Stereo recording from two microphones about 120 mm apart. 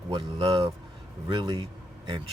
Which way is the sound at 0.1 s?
45° right (ahead or behind).